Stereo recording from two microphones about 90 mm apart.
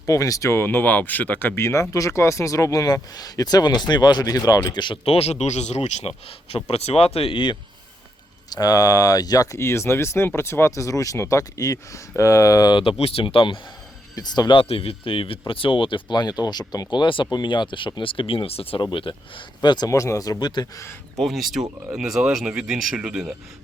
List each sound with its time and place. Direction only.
0.0 s speech: 40° left (ahead or behind); by 5.2 s 75° left (ahead or behind)
6.1 s speech: 90° left; by 7.6 s 65° left (ahead or behind)
8.4 s speech: 45° left (ahead or behind)
12.7 s speech: 80° left
14.2 s speech: 50° left (ahead or behind)
14.5 s speech: 90° left; by 17.0 s 45° left (ahead or behind)
17.0 s speech: 65° left (ahead or behind)
19.9 s speech: 35° left (ahead or behind)
21.2 s speech: centre (ahead or behind)